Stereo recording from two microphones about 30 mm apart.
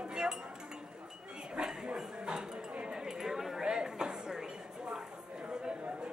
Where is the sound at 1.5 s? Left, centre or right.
Right.